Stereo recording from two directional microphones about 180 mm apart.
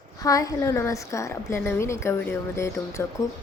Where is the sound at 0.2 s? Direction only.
20° left (ahead or behind).